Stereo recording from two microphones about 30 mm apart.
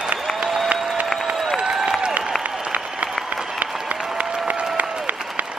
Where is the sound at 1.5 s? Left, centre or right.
Right.